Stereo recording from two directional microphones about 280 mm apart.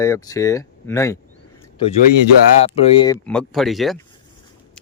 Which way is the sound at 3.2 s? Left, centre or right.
Centre.